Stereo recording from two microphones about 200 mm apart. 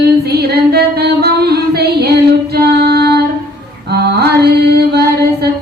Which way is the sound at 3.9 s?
55° right (ahead or behind).